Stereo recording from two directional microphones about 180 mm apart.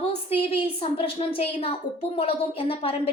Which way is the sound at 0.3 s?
30° left (ahead or behind).